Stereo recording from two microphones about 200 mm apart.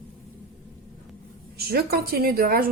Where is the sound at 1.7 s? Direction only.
50° right (ahead or behind).